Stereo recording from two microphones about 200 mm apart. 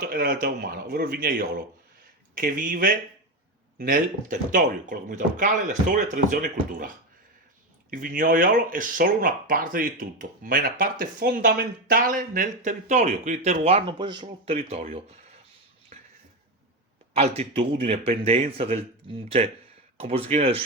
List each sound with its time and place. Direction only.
0.1 s speech: 45° right (ahead or behind)
17.2 s speech: 30° right (ahead or behind)